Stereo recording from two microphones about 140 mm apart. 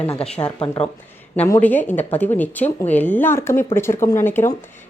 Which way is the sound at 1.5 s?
10° left (ahead or behind).